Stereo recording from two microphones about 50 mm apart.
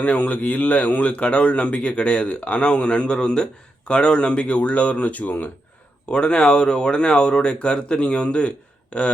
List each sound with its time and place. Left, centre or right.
0.0 s speech: left
6.1 s speech: centre